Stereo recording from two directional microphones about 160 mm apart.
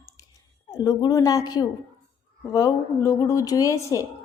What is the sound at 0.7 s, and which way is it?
A woman's voice, 25° left (ahead or behind).